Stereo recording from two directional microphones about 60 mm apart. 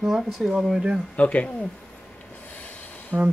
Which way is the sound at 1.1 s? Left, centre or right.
Left.